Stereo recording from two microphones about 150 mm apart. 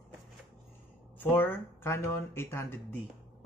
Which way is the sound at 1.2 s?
15° left (ahead or behind).